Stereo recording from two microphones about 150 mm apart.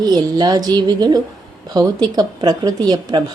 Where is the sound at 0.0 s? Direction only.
25° right (ahead or behind).